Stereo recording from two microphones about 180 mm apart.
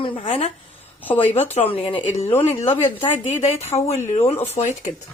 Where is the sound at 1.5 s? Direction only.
35° left (ahead or behind).